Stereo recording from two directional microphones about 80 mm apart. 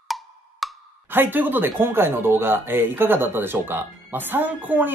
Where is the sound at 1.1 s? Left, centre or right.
Right.